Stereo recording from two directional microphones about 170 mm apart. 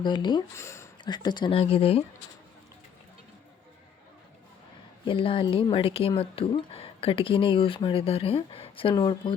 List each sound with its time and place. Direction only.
0.0 s speech: 25° left (ahead or behind)
5.0 s speech: 30° left (ahead or behind)